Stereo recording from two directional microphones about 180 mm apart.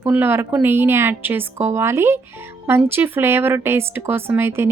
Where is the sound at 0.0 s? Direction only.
10° right (ahead or behind).